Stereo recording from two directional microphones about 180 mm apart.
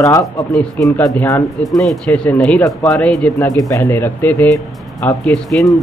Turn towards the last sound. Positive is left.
turn(degrees=5)  # may be behind; listen again after turning